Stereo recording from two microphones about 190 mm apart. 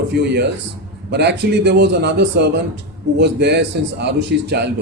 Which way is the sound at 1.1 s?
60° right (ahead or behind).